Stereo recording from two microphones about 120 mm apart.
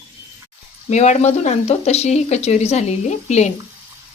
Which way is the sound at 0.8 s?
75° left (ahead or behind).